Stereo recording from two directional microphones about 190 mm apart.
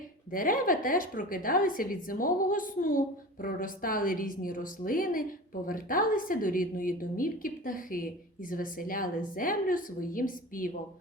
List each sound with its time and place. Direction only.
0.3 s a woman's voice: 45° left (ahead or behind)